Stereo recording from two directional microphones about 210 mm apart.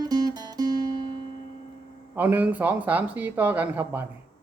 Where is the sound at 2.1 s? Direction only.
10° right (ahead or behind).